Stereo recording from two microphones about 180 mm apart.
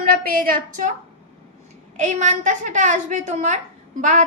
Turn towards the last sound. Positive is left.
turn(degrees=-45)  # may be behind; listen again after turning